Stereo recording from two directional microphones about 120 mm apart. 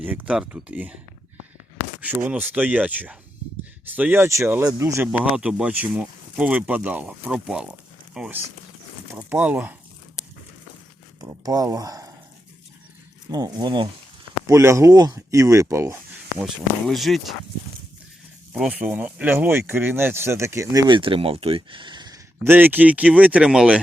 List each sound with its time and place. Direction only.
0.0 s speech: 15° right (ahead or behind)
2.0 s speech: 10° right (ahead or behind)
5.1 s speech: 10° right (ahead or behind)
11.2 s speech: 30° right (ahead or behind)
13.3 s speech: 35° right (ahead or behind)
14.4 s speech: 25° right (ahead or behind)
16.4 s speech: centre (ahead or behind)
18.5 s speech: 10° right (ahead or behind); by 20.8 s 25° right (ahead or behind)
20.8 s speech: 45° right (ahead or behind)
22.4 s speech: 15° right (ahead or behind)